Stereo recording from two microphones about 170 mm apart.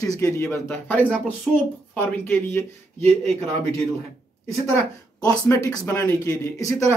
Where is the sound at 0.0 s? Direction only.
20° left (ahead or behind).